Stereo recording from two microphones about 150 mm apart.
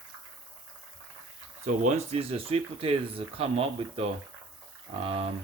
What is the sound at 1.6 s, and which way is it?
Speech, 50° right (ahead or behind).